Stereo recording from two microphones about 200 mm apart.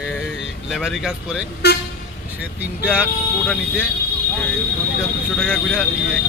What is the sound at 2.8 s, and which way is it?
Speech, 5° left (ahead or behind).